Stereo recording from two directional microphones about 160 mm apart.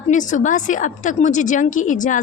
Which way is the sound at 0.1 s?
50° left (ahead or behind).